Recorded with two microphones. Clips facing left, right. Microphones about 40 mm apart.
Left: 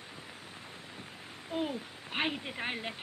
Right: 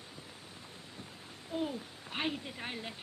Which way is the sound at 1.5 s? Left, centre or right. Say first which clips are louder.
Left 2 dB; left.